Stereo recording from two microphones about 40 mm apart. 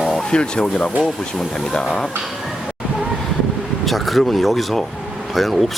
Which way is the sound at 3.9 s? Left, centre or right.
Centre.